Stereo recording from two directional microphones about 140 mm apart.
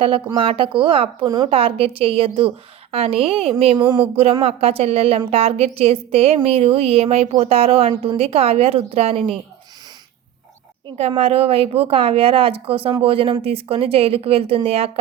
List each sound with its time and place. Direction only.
0.3 s a woman's voice: 40° right (ahead or behind)
11.1 s a woman's voice: 45° right (ahead or behind)